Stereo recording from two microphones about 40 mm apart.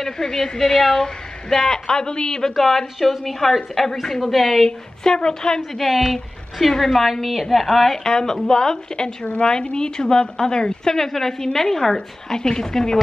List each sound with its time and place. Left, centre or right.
0.0 s a woman's voice: centre
2.5 s a woman's voice: centre
4.6 s a woman's voice: centre
5.6 s a woman's voice: centre
8.0 s a woman's voice: centre